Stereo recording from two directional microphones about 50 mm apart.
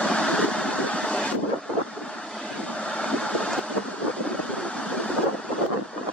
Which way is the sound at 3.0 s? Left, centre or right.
Centre.